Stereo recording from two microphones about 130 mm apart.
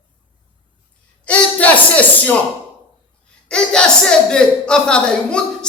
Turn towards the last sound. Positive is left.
turn(degrees=5)  # may be behind; listen again after turning